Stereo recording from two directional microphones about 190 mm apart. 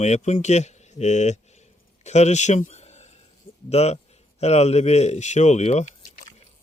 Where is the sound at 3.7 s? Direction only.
35° left (ahead or behind).